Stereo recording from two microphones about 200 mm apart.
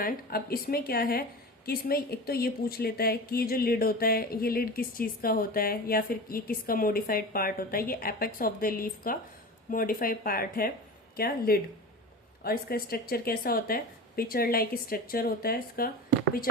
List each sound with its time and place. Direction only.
0.0 s speech: 50° left (ahead or behind)